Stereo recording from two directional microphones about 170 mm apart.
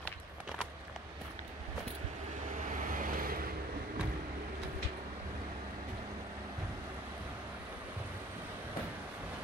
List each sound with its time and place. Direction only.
2.9 s vehicle: 55° right (ahead or behind)